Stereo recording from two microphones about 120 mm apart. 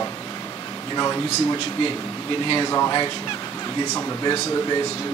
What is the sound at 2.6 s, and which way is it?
Speech, 30° left (ahead or behind).